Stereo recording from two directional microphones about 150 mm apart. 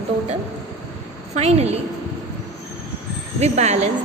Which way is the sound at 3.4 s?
45° right (ahead or behind).